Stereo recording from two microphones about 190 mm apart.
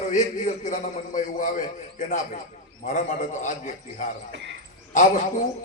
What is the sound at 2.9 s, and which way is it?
A man's voice, 40° left (ahead or behind).